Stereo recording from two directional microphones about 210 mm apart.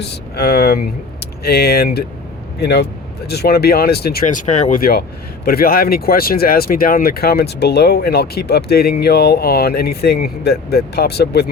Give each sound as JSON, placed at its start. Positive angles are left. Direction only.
{"t": 0.0, "sound": "speech", "side_deg": 50}